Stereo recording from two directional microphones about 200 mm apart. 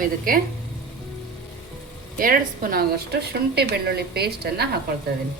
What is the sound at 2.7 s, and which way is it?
A woman's voice, 55° right (ahead or behind).